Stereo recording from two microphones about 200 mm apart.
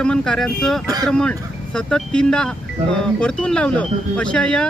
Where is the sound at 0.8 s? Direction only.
20° right (ahead or behind).